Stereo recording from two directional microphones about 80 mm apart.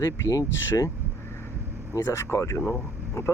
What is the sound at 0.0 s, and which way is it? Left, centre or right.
Speech, left.